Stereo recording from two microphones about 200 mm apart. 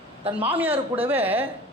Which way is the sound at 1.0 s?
10° right (ahead or behind).